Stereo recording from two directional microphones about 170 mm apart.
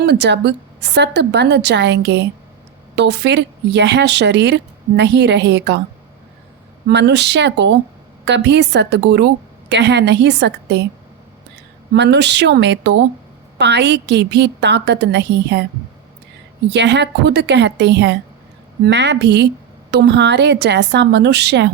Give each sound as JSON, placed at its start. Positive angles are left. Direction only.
{"t": 0.0, "sound": "a woman's voice", "side_deg": -85}
{"t": 6.8, "sound": "a woman's voice", "side_deg": -85}
{"t": 11.9, "sound": "a woman's voice", "side_deg": -90}
{"t": 16.6, "sound": "a woman's voice", "side_deg": -90}